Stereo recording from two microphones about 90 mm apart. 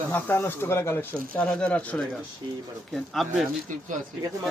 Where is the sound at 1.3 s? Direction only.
10° left (ahead or behind).